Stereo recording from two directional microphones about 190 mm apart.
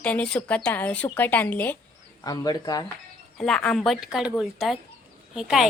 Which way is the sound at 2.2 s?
20° left (ahead or behind).